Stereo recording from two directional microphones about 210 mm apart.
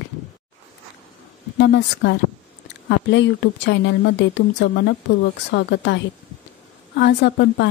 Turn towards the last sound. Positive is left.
turn(degrees=55)  # may be behind; listen again after turning